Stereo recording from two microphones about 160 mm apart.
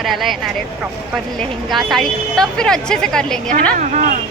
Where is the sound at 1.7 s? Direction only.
Centre (ahead or behind).